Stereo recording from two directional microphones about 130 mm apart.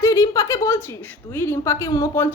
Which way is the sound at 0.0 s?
25° left (ahead or behind).